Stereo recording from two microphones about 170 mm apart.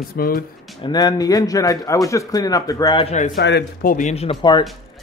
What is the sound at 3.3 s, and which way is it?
Speech, 75° left (ahead or behind).